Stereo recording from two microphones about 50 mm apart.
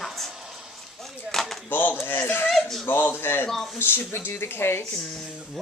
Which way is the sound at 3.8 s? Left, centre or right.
Left.